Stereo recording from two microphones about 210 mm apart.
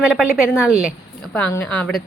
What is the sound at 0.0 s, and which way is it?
A woman's voice, 5° right (ahead or behind).